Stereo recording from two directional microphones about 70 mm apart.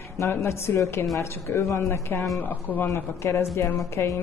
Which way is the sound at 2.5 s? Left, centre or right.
Left.